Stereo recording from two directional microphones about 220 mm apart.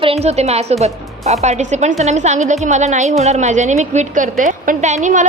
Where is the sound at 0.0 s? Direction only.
25° right (ahead or behind).